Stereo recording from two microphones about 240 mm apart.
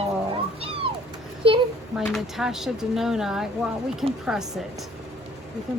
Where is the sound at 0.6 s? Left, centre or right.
Right.